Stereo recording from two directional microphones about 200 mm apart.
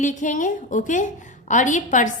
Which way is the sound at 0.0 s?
40° left (ahead or behind).